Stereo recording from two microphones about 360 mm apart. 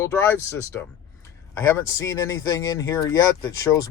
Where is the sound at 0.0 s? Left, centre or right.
Centre.